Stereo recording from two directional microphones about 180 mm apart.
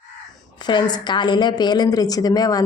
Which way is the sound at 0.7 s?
25° left (ahead or behind).